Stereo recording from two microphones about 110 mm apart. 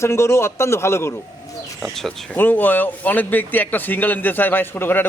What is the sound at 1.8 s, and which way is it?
Speech, centre (ahead or behind).